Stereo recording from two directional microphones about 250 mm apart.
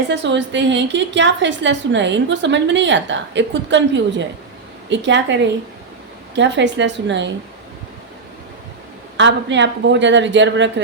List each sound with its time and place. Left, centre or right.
0.1 s a woman's voice: right
9.1 s a woman's voice: right